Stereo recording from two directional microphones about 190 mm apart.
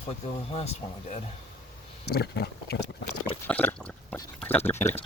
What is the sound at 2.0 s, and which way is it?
Speech, 55° left (ahead or behind).